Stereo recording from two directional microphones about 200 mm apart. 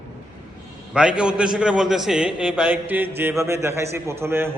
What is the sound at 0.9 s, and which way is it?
A man's voice, 5° right (ahead or behind).